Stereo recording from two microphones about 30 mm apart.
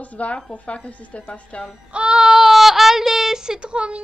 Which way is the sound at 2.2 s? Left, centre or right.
Centre.